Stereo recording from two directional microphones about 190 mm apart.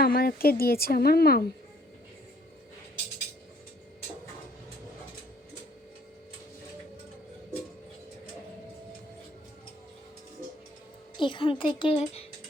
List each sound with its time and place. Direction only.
0.0 s speech: 50° left (ahead or behind)
11.2 s a woman's voice: 25° left (ahead or behind)